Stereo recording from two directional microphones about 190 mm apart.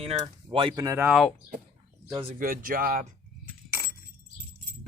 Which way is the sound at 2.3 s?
45° right (ahead or behind).